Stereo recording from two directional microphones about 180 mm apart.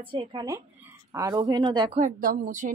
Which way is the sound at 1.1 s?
20° right (ahead or behind).